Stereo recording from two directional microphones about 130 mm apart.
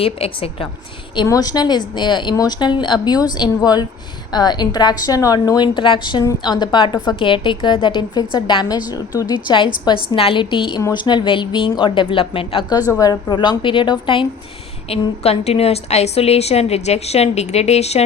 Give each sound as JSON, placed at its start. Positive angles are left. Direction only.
{"t": 0.0, "sound": "a woman's voice", "side_deg": 45}
{"t": 1.1, "sound": "a woman's voice", "side_deg": 30}
{"t": 12.7, "sound": "a woman's voice", "side_deg": 25}
{"t": 15.2, "sound": "a woman's voice", "side_deg": 50}